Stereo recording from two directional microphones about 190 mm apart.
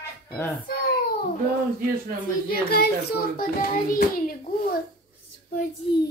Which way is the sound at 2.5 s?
50° left (ahead or behind).